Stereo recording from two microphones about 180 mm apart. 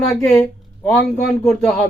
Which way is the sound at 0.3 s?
10° left (ahead or behind).